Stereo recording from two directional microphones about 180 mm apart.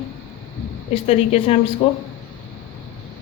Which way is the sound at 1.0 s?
35° left (ahead or behind).